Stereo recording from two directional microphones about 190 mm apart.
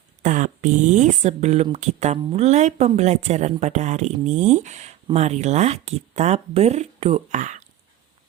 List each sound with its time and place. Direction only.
0.2 s speech: 40° right (ahead or behind)